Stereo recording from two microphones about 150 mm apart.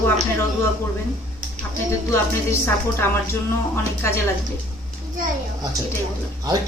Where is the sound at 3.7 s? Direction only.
15° left (ahead or behind).